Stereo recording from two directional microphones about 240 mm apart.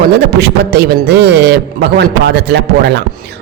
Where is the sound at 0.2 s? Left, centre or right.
Right.